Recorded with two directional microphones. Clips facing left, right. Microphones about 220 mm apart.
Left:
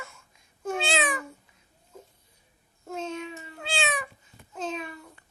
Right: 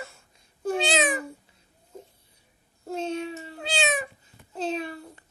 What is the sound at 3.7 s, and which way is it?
Cat, 20° right (ahead or behind).